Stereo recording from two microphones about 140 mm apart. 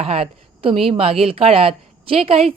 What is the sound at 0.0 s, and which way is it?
A woman's voice, 45° right (ahead or behind).